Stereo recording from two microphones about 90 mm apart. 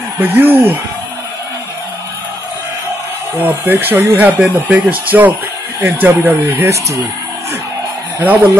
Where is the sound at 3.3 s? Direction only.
20° right (ahead or behind).